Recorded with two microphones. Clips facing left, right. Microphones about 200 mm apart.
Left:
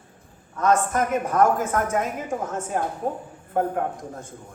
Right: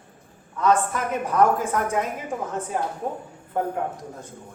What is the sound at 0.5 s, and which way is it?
A woman's voice, 45° left (ahead or behind).